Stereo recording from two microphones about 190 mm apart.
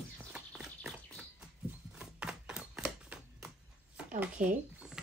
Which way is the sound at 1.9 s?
5° right (ahead or behind).